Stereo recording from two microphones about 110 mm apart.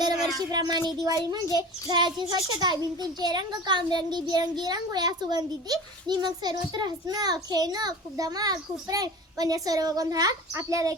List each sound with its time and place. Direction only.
0.5 s a child's voice: 35° right (ahead or behind)